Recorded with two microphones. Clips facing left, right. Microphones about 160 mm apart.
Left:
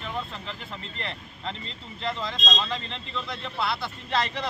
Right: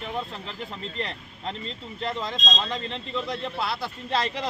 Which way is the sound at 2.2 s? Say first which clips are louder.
Right 1 dB; 40° right (ahead or behind).